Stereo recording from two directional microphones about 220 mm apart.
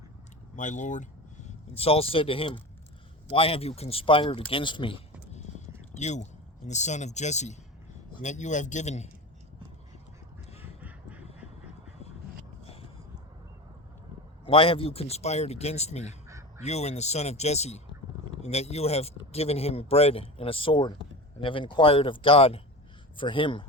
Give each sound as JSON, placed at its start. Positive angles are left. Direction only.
{"t": 0.5, "sound": "a man's voice", "side_deg": 35}
{"t": 10.6, "sound": "quack", "side_deg": -5}
{"t": 14.4, "sound": "speech", "side_deg": 25}